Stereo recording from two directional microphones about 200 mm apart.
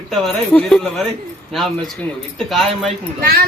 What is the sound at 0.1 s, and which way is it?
Speech, centre (ahead or behind).